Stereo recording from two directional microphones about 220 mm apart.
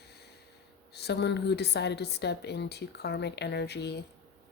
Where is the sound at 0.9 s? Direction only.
50° left (ahead or behind).